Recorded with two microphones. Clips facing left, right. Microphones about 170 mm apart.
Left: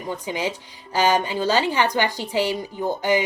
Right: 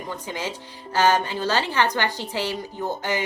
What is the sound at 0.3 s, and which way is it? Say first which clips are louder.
A woman's voice: left 4 dB; 15° left (ahead or behind).